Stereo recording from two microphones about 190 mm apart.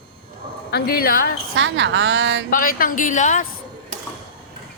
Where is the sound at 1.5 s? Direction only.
75° right (ahead or behind).